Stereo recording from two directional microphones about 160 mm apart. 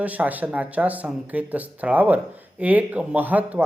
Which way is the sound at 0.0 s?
10° right (ahead or behind).